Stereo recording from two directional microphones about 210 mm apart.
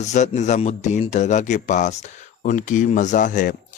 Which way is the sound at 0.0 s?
35° left (ahead or behind).